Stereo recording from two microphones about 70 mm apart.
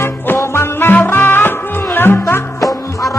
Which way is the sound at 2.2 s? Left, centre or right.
Left.